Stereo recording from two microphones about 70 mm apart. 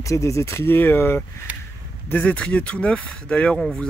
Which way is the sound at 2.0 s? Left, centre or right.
Left.